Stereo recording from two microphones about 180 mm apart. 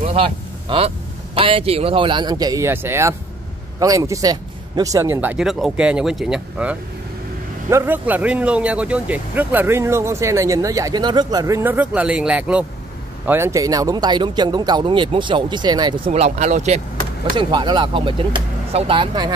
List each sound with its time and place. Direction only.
0.0 s speech: 30° right (ahead or behind)
16.1 s speech: 40° right (ahead or behind)
17.4 s speech: 25° right (ahead or behind)